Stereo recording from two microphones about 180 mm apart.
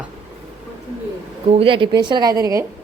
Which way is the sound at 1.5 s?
30° right (ahead or behind).